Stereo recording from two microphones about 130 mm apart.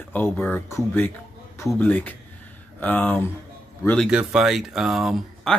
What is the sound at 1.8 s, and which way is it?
Speech, 10° left (ahead or behind).